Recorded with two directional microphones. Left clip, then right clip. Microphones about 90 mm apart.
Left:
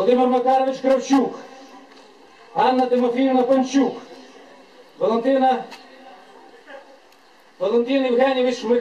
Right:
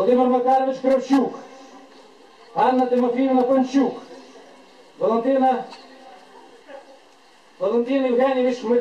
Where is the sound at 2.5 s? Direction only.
25° left (ahead or behind).